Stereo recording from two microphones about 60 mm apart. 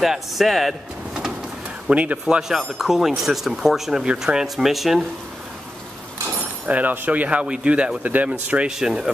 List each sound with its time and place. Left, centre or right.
0.0 s speech: centre
1.9 s speech: right
2.2 s speech: centre
6.6 s speech: right
8.7 s speech: centre